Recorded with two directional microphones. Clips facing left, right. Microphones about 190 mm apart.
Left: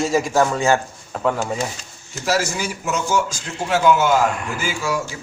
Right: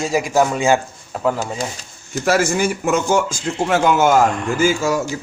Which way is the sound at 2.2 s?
55° right (ahead or behind).